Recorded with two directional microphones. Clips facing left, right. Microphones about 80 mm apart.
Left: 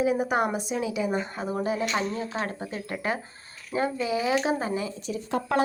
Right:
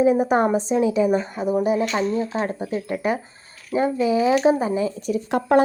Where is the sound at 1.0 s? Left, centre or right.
Centre.